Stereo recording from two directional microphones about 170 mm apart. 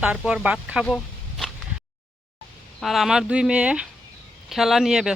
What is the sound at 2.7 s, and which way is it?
Speech, centre (ahead or behind).